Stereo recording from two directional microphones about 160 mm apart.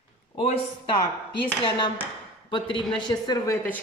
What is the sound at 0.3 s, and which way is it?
Speech, 35° left (ahead or behind).